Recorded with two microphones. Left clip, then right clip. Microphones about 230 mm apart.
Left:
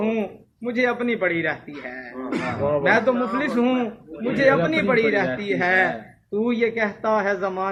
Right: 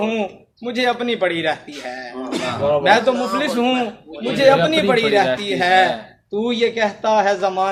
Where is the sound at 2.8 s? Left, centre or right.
Centre.